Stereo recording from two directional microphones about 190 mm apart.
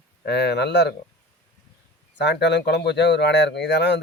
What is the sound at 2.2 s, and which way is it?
Speech, 65° left (ahead or behind).